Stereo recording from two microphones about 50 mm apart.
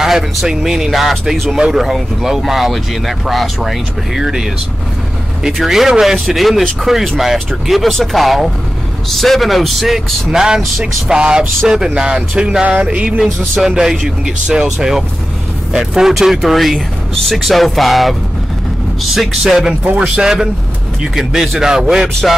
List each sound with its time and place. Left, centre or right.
0.0 s speech: centre
12.8 s music: right
13.2 s speech: centre
19.1 s speech: centre
19.8 s a man's voice: right
20.2 s speech: centre
22.2 s speech: centre